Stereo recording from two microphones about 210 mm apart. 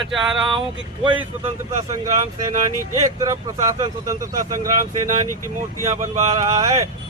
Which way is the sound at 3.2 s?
15° right (ahead or behind).